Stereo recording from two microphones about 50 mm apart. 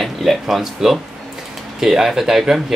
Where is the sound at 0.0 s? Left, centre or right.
Centre.